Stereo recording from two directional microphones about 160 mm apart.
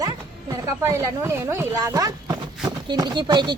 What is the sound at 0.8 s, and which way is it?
Speech, 20° right (ahead or behind).